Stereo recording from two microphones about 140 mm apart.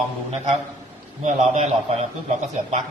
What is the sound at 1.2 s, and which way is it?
Speech, 55° right (ahead or behind).